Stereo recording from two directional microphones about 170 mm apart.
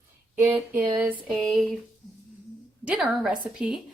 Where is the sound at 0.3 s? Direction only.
10° right (ahead or behind).